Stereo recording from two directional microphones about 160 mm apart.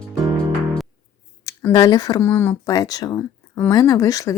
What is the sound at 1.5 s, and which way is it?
Speech, 15° left (ahead or behind).